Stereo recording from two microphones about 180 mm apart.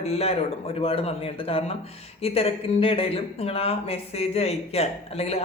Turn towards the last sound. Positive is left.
turn(degrees=35)  # may be behind; listen again after turning